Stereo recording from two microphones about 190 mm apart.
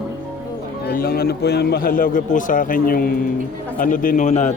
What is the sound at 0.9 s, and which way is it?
A man's voice, 50° left (ahead or behind).